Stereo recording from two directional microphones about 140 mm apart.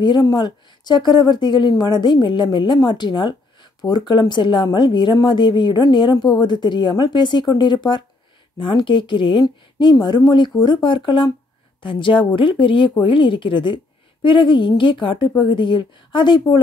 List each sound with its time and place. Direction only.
0.0 s a woman's voice: 30° left (ahead or behind)